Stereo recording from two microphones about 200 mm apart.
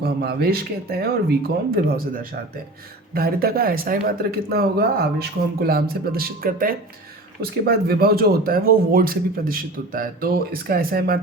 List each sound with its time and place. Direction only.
0.0 s speech: 50° right (ahead or behind)